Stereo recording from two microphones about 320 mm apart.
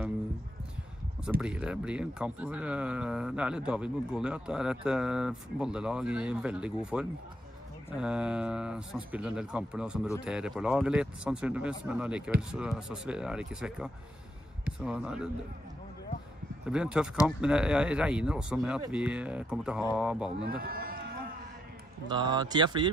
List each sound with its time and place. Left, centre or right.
1.4 s speech: centre
16.6 s speech: centre
20.4 s speech: right
22.0 s speech: centre